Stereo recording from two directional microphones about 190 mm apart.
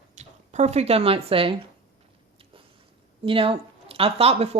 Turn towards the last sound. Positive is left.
turn(degrees=-30)  # may be behind; listen again after turning